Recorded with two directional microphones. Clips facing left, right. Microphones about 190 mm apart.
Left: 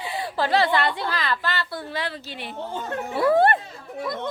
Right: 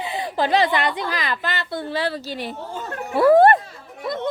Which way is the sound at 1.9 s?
35° right (ahead or behind).